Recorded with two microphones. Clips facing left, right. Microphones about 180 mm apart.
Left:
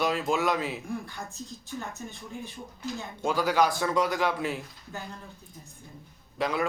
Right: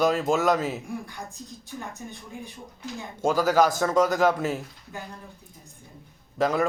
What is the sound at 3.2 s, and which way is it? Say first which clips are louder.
A man's voice: right 4 dB; 45° right (ahead or behind).